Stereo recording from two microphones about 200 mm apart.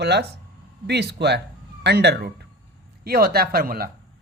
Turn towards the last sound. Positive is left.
turn(degrees=-50)  # may be behind; listen again after turning